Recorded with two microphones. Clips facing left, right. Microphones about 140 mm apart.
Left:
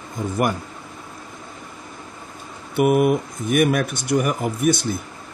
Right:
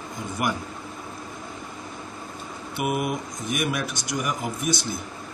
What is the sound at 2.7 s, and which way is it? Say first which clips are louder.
Speech: left 10 dB; 50° left (ahead or behind).